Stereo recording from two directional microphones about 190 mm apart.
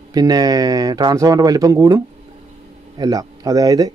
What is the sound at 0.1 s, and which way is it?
Speech, 20° right (ahead or behind).